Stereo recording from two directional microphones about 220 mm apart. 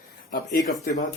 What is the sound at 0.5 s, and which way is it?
Speech, 40° left (ahead or behind).